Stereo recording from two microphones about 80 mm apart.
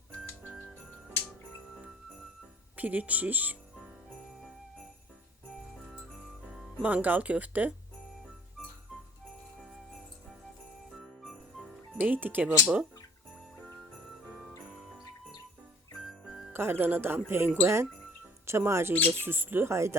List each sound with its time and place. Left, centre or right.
2.7 s speech: centre
6.8 s speech: right
10.9 s jingle bell: centre
11.9 s speech: right
16.0 s jingle bell: centre
16.5 s speech: right